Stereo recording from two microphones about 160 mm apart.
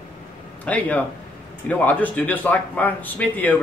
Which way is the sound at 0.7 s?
10° left (ahead or behind).